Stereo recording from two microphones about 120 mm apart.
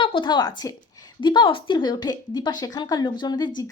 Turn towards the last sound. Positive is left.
turn(degrees=35)  # may be behind; listen again after turning